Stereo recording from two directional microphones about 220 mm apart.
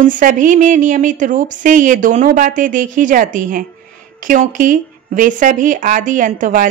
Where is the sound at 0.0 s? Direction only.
35° right (ahead or behind).